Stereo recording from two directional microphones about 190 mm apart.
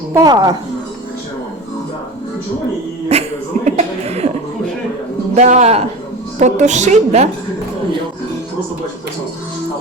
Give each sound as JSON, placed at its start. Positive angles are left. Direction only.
{"t": 0.1, "sound": "a woman's voice", "side_deg": -20}
{"t": 3.1, "sound": "speech", "side_deg": -35}
{"t": 5.3, "sound": "a woman's voice", "side_deg": -35}